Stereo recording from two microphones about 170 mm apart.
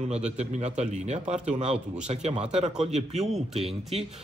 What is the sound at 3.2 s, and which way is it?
Speech, centre (ahead or behind).